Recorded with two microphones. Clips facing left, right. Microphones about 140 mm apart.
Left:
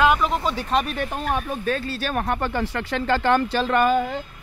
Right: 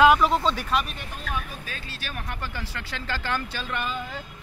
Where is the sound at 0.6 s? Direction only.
45° left (ahead or behind).